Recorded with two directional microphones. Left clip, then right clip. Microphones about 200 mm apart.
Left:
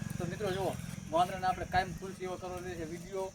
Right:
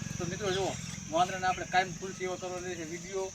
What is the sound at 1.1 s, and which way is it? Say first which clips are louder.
Speech: right 1 dB; 20° left (ahead or behind).